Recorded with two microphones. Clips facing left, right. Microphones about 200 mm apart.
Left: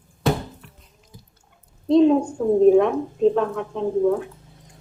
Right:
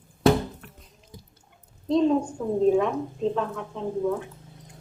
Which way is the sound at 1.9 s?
65° left (ahead or behind).